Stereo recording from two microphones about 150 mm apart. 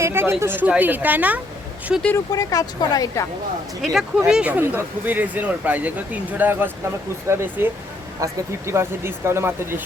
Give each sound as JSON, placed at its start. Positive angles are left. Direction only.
{"t": 0.0, "sound": "speech", "side_deg": -15}
{"t": 2.1, "sound": "speech", "side_deg": 25}
{"t": 3.8, "sound": "speech", "side_deg": 0}